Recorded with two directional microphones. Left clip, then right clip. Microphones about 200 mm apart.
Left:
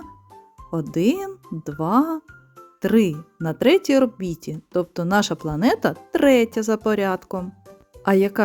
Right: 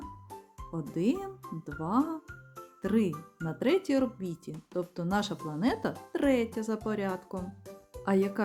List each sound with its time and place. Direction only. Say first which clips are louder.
0.7 s speech: left 10 dB; 45° left (ahead or behind)